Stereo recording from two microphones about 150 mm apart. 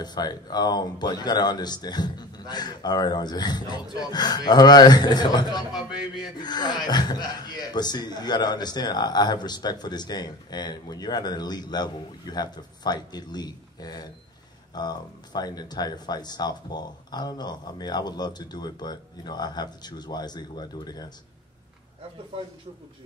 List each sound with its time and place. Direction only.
0.0 s speech: 25° left (ahead or behind)